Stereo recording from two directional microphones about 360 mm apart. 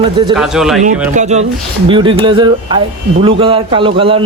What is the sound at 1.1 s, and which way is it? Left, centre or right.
A man's voice, centre.